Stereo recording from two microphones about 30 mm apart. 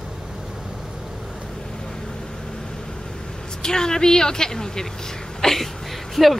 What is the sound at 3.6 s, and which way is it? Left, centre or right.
Speech, left.